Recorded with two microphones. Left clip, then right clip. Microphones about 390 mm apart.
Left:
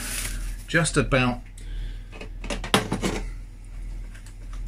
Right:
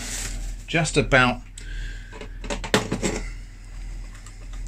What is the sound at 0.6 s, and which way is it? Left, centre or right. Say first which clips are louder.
Speech: even; centre.